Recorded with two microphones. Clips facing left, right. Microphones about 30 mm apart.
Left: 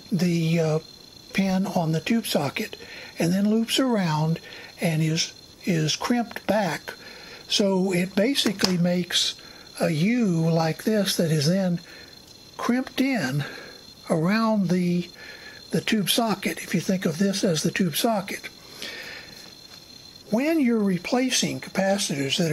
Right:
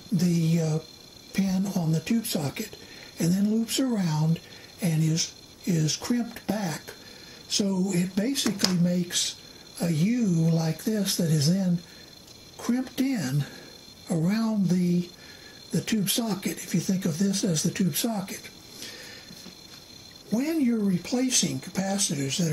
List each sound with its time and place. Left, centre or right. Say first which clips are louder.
0.2 s speech: left 3 dB; left
18.1 s a sound: left 6 dB; left
20.3 s speech: left 4 dB; left